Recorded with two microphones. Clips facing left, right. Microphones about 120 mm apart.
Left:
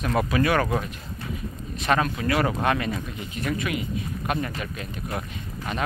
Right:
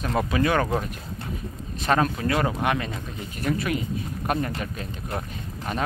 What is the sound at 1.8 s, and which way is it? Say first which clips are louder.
Speech: right 1 dB; 35° right (ahead or behind).